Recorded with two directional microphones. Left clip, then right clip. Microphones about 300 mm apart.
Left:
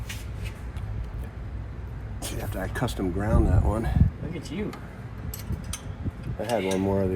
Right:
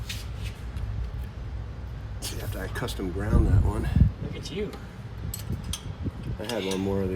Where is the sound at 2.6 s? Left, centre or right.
Left.